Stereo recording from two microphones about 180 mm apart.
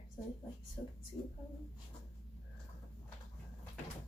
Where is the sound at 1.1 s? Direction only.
15° left (ahead or behind).